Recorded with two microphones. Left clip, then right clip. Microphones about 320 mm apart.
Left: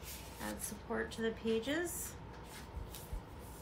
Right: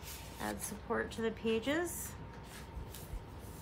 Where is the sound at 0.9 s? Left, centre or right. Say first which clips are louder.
Right 2 dB; right.